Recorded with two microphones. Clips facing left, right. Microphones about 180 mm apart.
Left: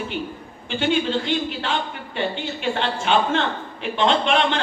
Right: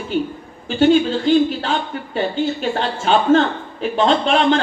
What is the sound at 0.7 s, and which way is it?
A man's voice, 40° right (ahead or behind).